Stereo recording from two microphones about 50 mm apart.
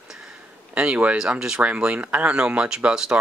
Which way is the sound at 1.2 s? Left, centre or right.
Centre.